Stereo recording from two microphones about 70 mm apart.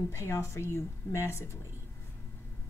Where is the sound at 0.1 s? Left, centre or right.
Left.